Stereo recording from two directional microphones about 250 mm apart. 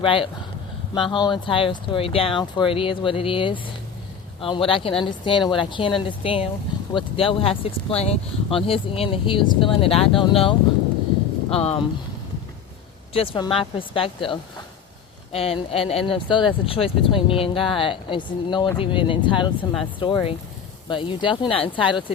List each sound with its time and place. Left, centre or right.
0.0 s speech: left
11.5 s speech: left
13.1 s speech: left